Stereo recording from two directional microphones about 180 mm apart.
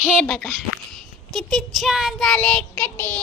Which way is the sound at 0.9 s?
5° left (ahead or behind).